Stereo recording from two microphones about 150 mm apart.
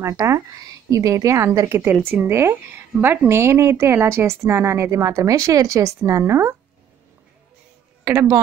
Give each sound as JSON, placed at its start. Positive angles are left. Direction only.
{"t": 0.0, "sound": "a woman's voice", "side_deg": -20}
{"t": 8.0, "sound": "speech", "side_deg": -15}